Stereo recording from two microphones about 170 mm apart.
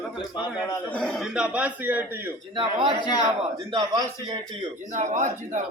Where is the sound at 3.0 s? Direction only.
25° left (ahead or behind).